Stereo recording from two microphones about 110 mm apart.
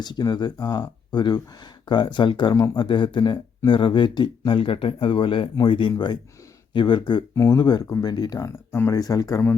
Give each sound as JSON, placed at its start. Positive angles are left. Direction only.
{"t": 0.0, "sound": "speech", "side_deg": 40}
{"t": 7.3, "sound": "speech", "side_deg": 35}
{"t": 8.4, "sound": "speech", "side_deg": 25}